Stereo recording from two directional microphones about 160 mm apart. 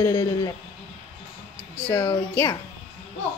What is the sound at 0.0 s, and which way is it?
Speech, 20° left (ahead or behind).